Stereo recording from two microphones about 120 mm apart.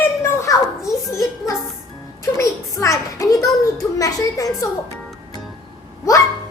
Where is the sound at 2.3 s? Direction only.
25° left (ahead or behind).